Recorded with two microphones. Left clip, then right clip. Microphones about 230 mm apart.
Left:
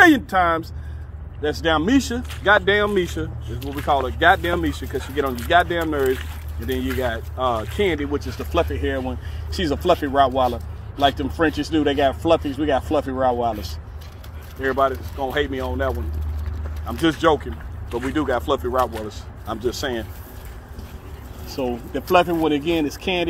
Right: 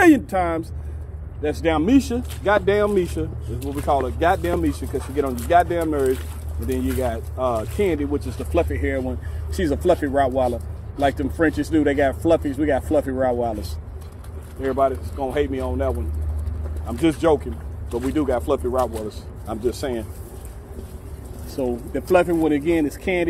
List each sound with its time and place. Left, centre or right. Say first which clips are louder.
1.5 s speech: even; centre
9.5 s speech: even; centre
21.5 s speech: even; centre